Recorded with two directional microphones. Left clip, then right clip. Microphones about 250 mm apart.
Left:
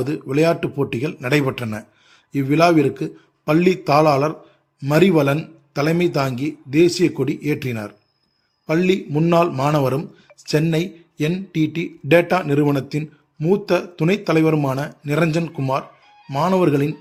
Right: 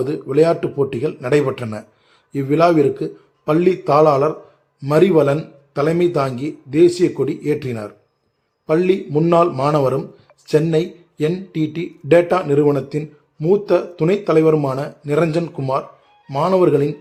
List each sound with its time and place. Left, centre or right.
0.0 s a man's voice: left